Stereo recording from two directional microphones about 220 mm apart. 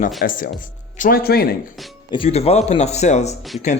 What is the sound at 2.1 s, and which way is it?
Speech, 25° left (ahead or behind).